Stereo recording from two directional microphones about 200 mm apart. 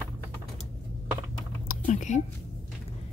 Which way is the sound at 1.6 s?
40° left (ahead or behind).